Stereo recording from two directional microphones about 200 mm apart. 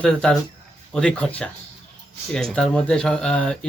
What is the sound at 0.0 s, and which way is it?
A woman's voice, 5° left (ahead or behind).